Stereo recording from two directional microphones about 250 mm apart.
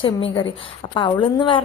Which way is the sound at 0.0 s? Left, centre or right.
Centre.